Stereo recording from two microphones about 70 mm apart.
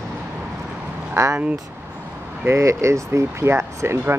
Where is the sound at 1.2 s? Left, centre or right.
Right.